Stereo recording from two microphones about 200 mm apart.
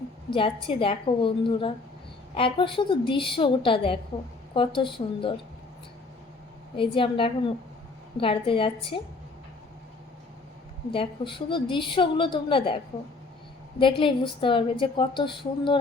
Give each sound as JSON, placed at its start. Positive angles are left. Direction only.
{"t": 0.3, "sound": "a woman's voice", "side_deg": 25}
{"t": 6.7, "sound": "a woman's voice", "side_deg": 25}
{"t": 10.9, "sound": "a woman's voice", "side_deg": 25}